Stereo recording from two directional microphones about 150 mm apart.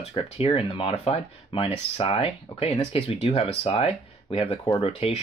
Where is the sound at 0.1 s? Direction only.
40° left (ahead or behind).